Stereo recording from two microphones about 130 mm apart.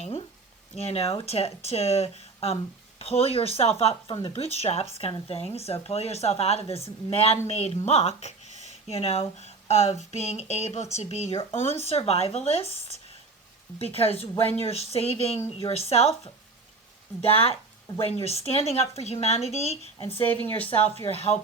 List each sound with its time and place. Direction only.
0.9 s speech: 50° left (ahead or behind)
20.1 s speech: 15° left (ahead or behind)
20.7 s speech: 50° left (ahead or behind)